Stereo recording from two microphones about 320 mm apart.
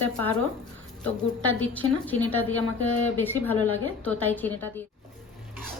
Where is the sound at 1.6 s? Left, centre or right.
Centre.